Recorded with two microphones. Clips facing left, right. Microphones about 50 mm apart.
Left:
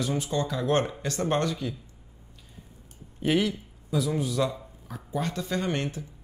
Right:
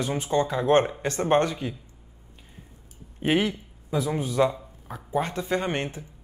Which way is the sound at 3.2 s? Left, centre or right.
Right.